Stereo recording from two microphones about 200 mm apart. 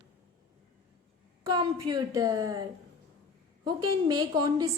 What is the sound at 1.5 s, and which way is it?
A woman's voice, 20° right (ahead or behind).